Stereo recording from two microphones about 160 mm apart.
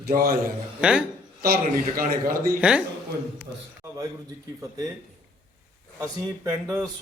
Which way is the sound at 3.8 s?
15° right (ahead or behind).